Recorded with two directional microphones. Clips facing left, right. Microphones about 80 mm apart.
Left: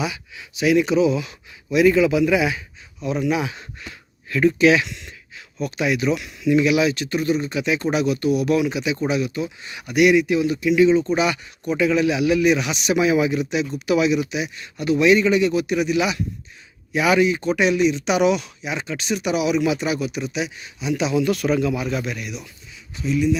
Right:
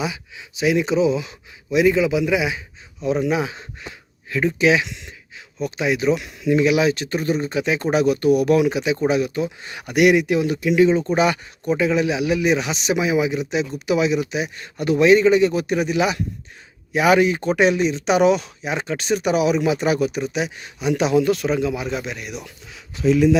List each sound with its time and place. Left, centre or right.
0.0 s speech: right
3.0 s speech: right
14.3 s speech: right
21.2 s speech: right
22.3 s speech: right
22.7 s speech: right